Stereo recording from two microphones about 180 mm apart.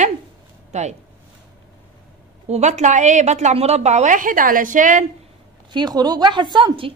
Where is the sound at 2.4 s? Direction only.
40° right (ahead or behind).